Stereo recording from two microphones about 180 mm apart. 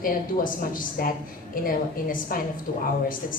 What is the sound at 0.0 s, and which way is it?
A woman's voice, 50° left (ahead or behind).